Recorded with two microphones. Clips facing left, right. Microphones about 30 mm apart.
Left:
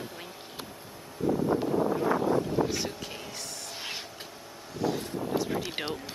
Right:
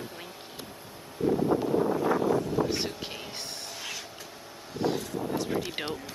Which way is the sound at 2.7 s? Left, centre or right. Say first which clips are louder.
Right 1 dB; right.